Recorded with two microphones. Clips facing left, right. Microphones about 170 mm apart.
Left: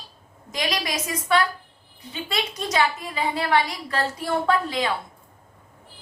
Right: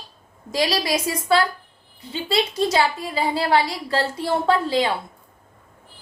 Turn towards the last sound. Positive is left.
turn(degrees=-30)  # may be behind; listen again after turning